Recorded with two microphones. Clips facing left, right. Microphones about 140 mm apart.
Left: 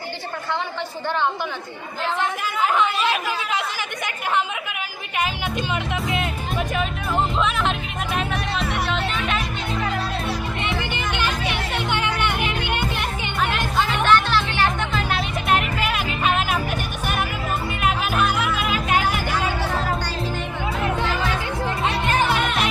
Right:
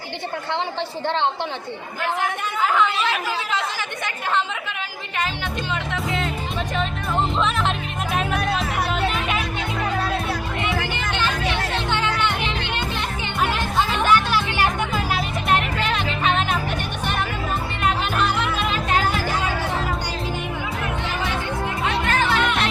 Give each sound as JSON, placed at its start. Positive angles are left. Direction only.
{"t": 1.0, "sound": "a woman's voice", "side_deg": -25}
{"t": 2.1, "sound": "speech", "side_deg": 20}
{"t": 5.7, "sound": "speech", "side_deg": 15}
{"t": 7.3, "sound": "music", "side_deg": 0}
{"t": 10.6, "sound": "music", "side_deg": 20}
{"t": 13.8, "sound": "music", "side_deg": -10}
{"t": 17.8, "sound": "music", "side_deg": 5}
{"t": 22.0, "sound": "music", "side_deg": 15}